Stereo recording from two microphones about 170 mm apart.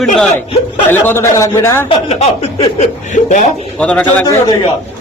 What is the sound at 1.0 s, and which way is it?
Speech, 15° left (ahead or behind).